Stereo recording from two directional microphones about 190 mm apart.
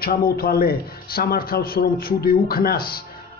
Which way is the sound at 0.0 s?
55° left (ahead or behind).